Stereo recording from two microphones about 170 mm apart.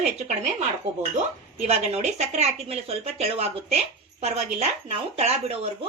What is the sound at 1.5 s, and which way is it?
Speech, 40° right (ahead or behind).